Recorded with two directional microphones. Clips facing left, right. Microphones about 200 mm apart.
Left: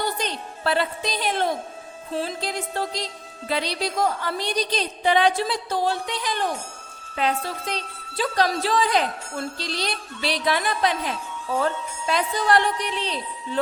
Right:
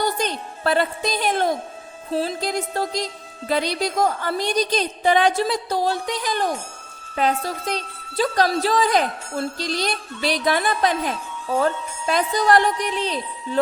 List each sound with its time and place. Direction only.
0.0 s a woman's voice: 45° right (ahead or behind)